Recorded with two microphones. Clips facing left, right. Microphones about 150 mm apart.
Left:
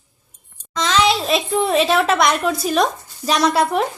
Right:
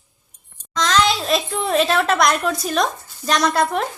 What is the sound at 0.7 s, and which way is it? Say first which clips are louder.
A child's voice: left 1 dB; centre (ahead or behind).